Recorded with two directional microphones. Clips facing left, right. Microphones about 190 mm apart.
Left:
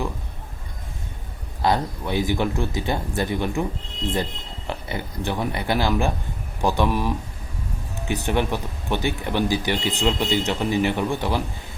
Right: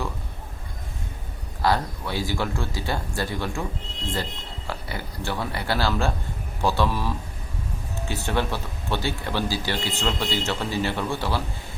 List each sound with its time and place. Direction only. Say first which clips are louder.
1.6 s speech: left 2 dB; 20° left (ahead or behind)